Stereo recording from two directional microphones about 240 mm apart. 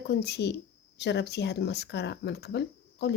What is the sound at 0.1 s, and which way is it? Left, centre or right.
Speech, left.